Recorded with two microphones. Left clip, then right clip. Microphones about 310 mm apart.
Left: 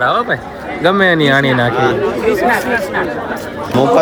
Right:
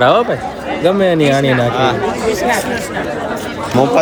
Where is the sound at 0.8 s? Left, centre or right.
Centre.